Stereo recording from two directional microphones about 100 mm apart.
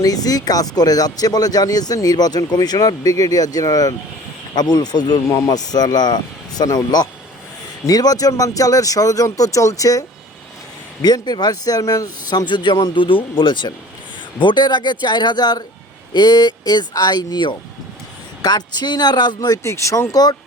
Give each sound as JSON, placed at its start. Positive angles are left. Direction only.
{"t": 0.0, "sound": "speech", "side_deg": 40}
{"t": 11.0, "sound": "speech", "side_deg": 45}
{"t": 19.6, "sound": "speech", "side_deg": 30}